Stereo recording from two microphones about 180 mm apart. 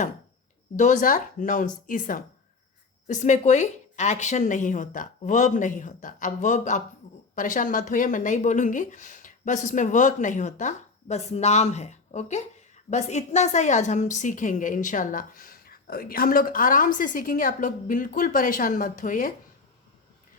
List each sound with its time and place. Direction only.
0.8 s speech: 45° left (ahead or behind)